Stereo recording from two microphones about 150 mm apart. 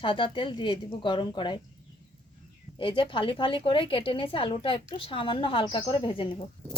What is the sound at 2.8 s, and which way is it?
A woman's voice, 35° left (ahead or behind).